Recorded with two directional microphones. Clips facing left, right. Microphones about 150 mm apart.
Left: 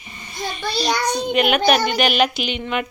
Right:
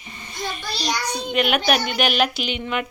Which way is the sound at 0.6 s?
60° left (ahead or behind).